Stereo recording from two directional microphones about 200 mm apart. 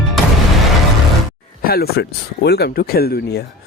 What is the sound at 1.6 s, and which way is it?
Speech, 50° left (ahead or behind).